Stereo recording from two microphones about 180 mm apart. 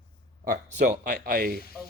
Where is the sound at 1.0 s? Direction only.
55° right (ahead or behind).